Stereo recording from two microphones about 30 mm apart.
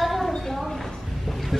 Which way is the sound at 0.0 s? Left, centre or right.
Centre.